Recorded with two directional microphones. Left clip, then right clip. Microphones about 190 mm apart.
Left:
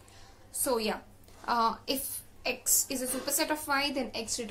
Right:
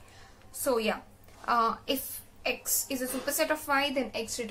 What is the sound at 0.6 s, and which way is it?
A woman's voice, 10° right (ahead or behind).